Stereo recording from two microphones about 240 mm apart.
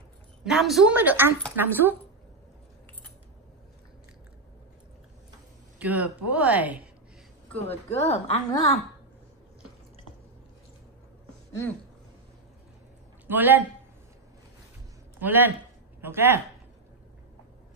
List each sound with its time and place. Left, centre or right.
0.4 s a woman's voice: centre
5.8 s speech: centre
7.5 s a woman's voice: left
13.3 s speech: centre
15.1 s a woman's voice: centre